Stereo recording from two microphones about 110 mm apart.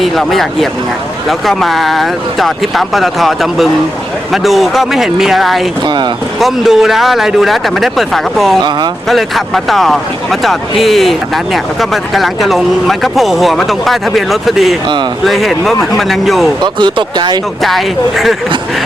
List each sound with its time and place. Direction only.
0.0 s speech: centre (ahead or behind)
16.8 s speech: 40° right (ahead or behind)
17.6 s speech: centre (ahead or behind)